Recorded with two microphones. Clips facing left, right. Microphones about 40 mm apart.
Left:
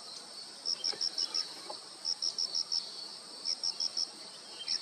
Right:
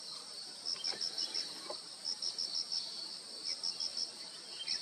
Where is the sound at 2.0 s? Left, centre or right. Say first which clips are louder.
Left 4 dB; right.